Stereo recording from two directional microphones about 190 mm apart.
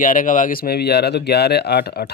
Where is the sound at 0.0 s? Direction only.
45° left (ahead or behind).